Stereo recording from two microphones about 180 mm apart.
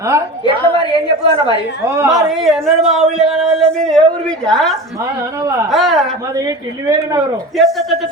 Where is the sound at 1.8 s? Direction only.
15° right (ahead or behind).